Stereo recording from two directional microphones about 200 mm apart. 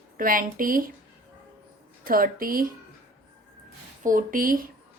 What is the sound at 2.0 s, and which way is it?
Speech, 45° right (ahead or behind).